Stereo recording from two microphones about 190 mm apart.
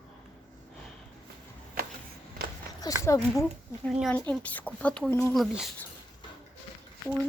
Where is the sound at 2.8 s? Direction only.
20° left (ahead or behind).